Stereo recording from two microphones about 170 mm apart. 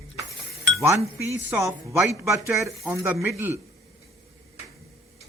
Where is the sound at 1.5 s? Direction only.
15° right (ahead or behind).